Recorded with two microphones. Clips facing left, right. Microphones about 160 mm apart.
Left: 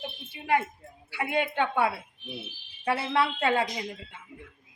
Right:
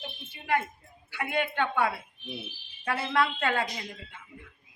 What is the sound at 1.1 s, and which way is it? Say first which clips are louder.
A woman's voice: left 2 dB; 30° left (ahead or behind).